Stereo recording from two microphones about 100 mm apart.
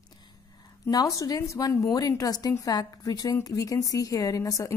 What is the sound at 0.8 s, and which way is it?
A woman's voice, 35° left (ahead or behind).